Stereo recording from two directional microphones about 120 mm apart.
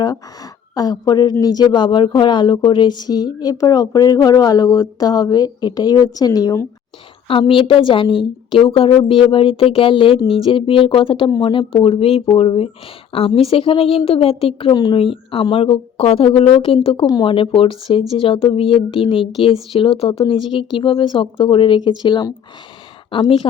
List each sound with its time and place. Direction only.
0.8 s speech: 35° left (ahead or behind)
7.3 s a woman's voice: 45° left (ahead or behind)
14.7 s speech: 35° left (ahead or behind)
14.9 s a woman's voice: 50° left (ahead or behind)